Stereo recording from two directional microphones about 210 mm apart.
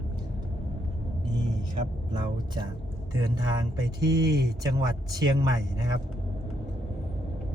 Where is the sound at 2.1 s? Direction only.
20° right (ahead or behind).